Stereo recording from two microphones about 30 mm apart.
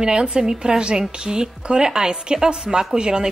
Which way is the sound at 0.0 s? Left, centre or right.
Right.